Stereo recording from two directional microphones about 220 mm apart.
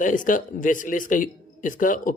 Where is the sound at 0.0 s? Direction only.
35° left (ahead or behind).